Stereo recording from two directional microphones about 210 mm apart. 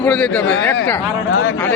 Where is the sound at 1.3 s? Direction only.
70° left (ahead or behind).